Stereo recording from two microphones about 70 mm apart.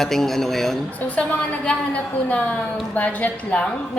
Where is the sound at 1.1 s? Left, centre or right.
Centre.